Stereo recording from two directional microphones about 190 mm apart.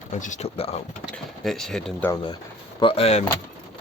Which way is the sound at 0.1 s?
40° left (ahead or behind).